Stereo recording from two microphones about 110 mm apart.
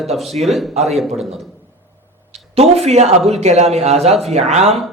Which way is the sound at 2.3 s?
75° right (ahead or behind).